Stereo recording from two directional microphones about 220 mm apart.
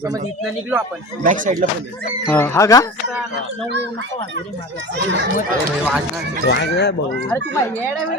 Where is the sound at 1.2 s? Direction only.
35° right (ahead or behind).